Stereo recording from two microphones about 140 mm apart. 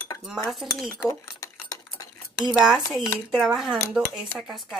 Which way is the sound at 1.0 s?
25° left (ahead or behind).